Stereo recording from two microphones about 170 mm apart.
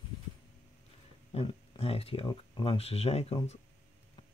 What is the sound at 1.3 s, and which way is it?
Speech, 30° left (ahead or behind).